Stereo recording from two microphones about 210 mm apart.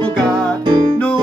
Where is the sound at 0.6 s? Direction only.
25° right (ahead or behind).